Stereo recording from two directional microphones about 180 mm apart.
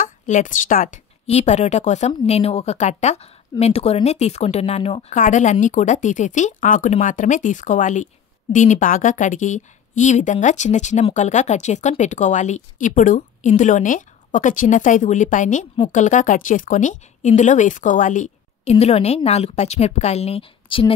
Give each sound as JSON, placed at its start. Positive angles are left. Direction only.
{"t": 0.0, "sound": "a woman's voice", "side_deg": 45}